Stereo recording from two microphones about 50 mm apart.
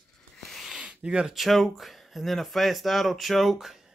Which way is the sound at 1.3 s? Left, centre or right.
Centre.